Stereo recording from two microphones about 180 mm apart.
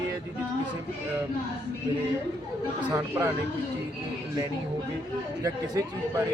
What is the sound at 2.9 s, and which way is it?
Speech, 15° right (ahead or behind).